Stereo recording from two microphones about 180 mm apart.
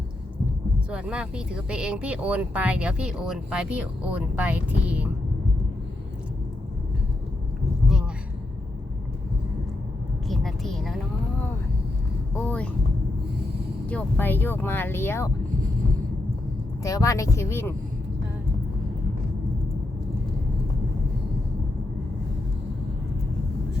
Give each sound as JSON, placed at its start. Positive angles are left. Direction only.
{"t": 0.9, "sound": "speech", "side_deg": -5}
{"t": 10.2, "sound": "a sound", "side_deg": 0}
{"t": 12.4, "sound": "speech", "side_deg": 5}
{"t": 13.8, "sound": "speech", "side_deg": 10}
{"t": 16.8, "sound": "speech", "side_deg": 20}